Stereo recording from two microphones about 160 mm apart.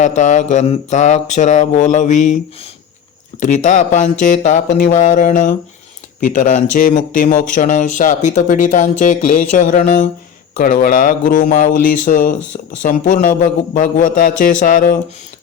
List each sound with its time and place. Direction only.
0.0 s speech: 50° left (ahead or behind)
3.4 s a man's voice: 50° left (ahead or behind)
10.6 s a man's voice: 60° left (ahead or behind)